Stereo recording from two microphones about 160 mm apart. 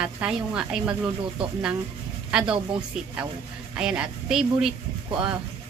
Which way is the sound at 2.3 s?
5° right (ahead or behind).